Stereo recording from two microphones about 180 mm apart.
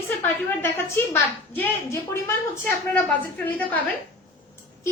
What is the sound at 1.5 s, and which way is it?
A woman's voice, 10° left (ahead or behind).